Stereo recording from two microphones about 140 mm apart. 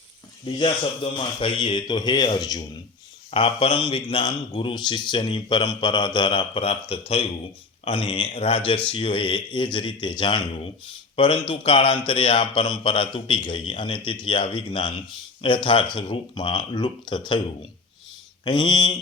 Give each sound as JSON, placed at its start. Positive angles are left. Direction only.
{"t": 1.4, "sound": "speech", "side_deg": 35}
{"t": 3.3, "sound": "speech", "side_deg": 40}
{"t": 18.4, "sound": "speech", "side_deg": 35}